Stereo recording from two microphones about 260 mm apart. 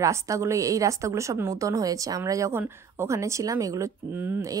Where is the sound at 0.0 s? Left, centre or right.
Centre.